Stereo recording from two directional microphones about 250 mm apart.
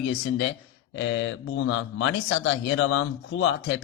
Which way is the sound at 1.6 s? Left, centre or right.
Left.